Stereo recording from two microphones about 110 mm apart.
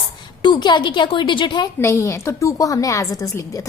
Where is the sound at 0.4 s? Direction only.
40° left (ahead or behind).